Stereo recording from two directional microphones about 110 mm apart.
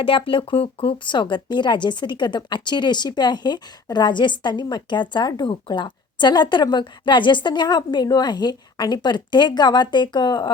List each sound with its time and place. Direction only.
0.0 s speech: 55° left (ahead or behind)